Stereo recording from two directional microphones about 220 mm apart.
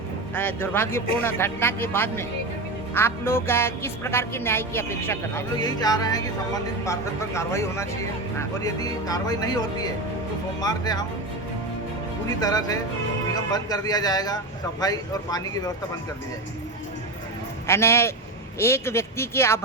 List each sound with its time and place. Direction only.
0.3 s speech: 10° left (ahead or behind)
12.4 s speech: 15° left (ahead or behind)
17.7 s speech: 10° left (ahead or behind)